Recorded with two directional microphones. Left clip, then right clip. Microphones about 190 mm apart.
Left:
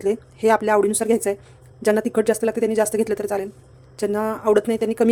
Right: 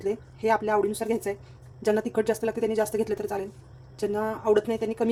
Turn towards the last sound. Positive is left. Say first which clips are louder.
# left 6 dB
turn(degrees=40)  # may be behind; listen again after turning